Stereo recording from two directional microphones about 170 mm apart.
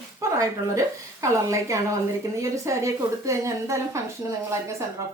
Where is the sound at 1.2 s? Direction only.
20° right (ahead or behind).